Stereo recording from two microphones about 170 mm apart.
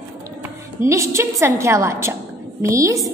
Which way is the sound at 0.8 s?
15° right (ahead or behind).